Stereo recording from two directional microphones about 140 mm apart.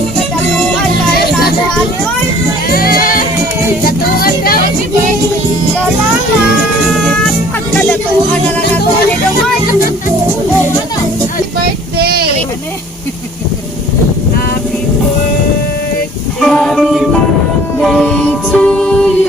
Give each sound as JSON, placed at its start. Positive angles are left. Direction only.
{"t": 3.8, "sound": "music", "side_deg": 90}
{"t": 6.8, "sound": "music", "side_deg": 0}
{"t": 7.8, "sound": "music", "side_deg": 10}
{"t": 11.6, "sound": "child singing", "side_deg": -90}
{"t": 16.4, "sound": "music", "side_deg": 5}